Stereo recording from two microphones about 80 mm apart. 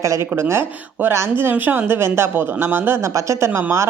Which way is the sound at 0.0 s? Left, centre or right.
Right.